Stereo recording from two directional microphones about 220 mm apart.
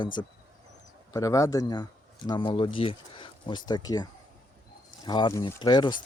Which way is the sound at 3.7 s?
15° left (ahead or behind).